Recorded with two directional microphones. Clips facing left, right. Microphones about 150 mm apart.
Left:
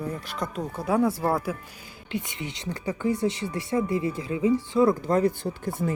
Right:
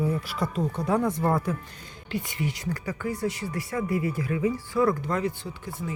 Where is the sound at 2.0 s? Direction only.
20° left (ahead or behind).